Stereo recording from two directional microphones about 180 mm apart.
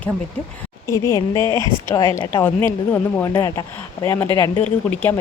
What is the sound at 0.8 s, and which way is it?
A woman's voice, 15° left (ahead or behind).